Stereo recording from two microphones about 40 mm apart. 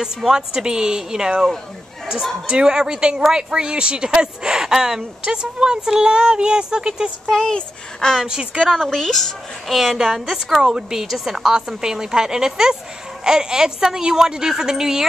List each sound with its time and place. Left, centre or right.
0.0 s a woman's voice: centre
2.5 s a woman's voice: centre
7.2 s speech: centre
8.6 s a woman's voice: centre